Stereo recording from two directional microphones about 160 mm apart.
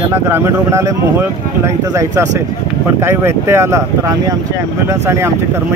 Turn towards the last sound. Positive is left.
turn(degrees=-15)  # may be behind; listen again after turning